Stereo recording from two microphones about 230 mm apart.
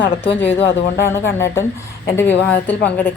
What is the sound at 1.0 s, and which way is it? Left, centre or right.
A woman's voice, centre.